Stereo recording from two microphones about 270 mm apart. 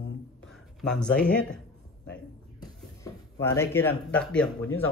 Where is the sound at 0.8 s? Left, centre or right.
Centre.